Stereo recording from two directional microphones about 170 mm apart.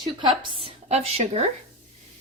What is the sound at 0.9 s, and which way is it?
Speech, 40° right (ahead or behind).